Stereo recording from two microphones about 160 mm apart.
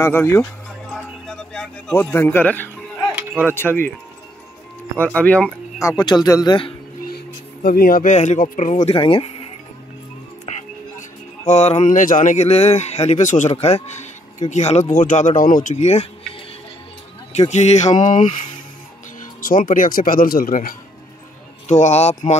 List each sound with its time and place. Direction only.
0.0 s speech: 15° left (ahead or behind)
1.5 s speech: 5° left (ahead or behind)
5.0 s speech: 10° left (ahead or behind)
5.8 s speech: 20° left (ahead or behind)
7.1 s speech: 70° left (ahead or behind); by 8.9 s 50° left (ahead or behind)
8.9 s speech: 35° left (ahead or behind)
10.5 s music: 45° left (ahead or behind)
11.0 s speech: 45° left (ahead or behind)
17.4 s speech: 45° left (ahead or behind)
19.4 s speech: 60° left (ahead or behind)
21.6 s speech: 45° left (ahead or behind)